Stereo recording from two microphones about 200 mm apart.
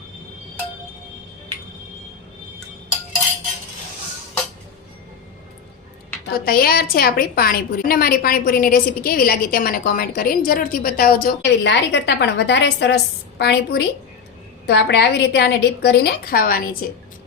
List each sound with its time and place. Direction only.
6.3 s a woman's voice: 50° left (ahead or behind)